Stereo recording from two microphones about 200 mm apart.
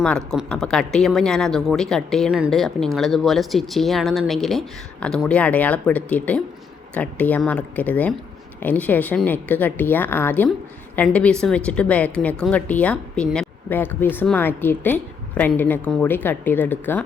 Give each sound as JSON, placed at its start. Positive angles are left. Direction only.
{"t": 0.0, "sound": "a woman's voice", "side_deg": 5}